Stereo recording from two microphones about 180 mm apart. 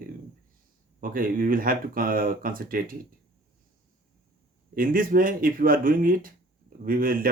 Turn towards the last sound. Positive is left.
turn(degrees=-50)  # may be behind; listen again after turning